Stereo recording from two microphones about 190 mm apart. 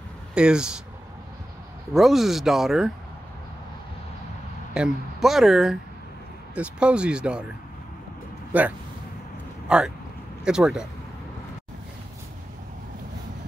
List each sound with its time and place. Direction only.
0.3 s speech: 5° right (ahead or behind)
2.0 s speech: centre (ahead or behind)
4.7 s speech: 5° right (ahead or behind)
8.5 s speech: 10° right (ahead or behind)